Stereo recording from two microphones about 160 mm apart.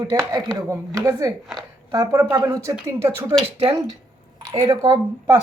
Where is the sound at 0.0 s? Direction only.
20° right (ahead or behind).